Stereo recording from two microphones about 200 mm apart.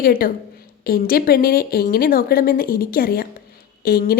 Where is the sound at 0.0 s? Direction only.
50° left (ahead or behind).